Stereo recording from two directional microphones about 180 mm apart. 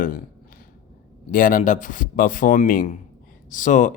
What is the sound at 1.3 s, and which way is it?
Speech, 50° left (ahead or behind).